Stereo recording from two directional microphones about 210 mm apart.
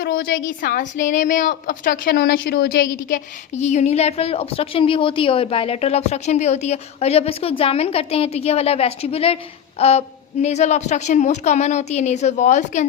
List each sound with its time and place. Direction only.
0.0 s a woman's voice: 45° left (ahead or behind)
3.1 s a woman's voice: 35° left (ahead or behind)